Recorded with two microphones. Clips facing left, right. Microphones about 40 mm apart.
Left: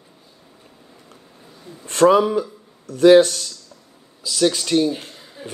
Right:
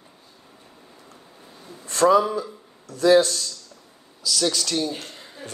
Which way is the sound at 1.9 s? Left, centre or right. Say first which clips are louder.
Left 3 dB; left.